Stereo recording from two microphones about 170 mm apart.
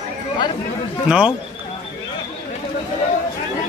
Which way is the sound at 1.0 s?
5° right (ahead or behind).